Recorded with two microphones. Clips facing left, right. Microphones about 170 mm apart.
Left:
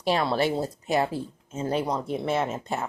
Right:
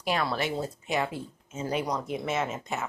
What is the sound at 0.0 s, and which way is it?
Speech, 30° left (ahead or behind).